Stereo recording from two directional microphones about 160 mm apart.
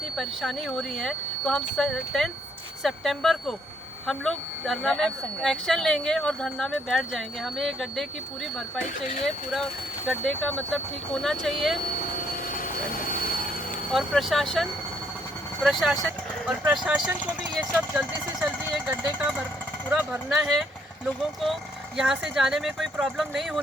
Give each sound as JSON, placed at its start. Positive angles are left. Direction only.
{"t": 0.2, "sound": "speech", "side_deg": 0}
{"t": 9.2, "sound": "speech", "side_deg": 0}
{"t": 12.5, "sound": "a sound", "side_deg": 60}
{"t": 13.9, "sound": "speech", "side_deg": 0}